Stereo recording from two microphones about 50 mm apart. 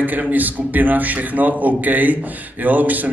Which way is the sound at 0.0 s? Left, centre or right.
Right.